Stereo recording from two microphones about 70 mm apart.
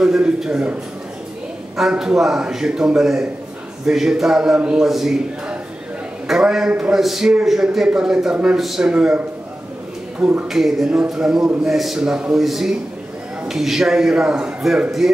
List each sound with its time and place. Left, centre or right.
0.0 s a sound: centre
1.8 s a man's voice: centre
4.8 s speech: centre
6.2 s a man's voice: centre
10.5 s a man's voice: centre